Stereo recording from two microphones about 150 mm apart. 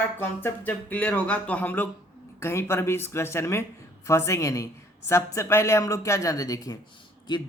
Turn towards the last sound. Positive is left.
turn(degrees=30)  # may be behind; listen again after turning